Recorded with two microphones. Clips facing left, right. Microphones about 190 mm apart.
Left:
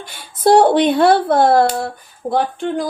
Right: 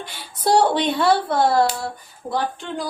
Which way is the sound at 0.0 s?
50° left (ahead or behind).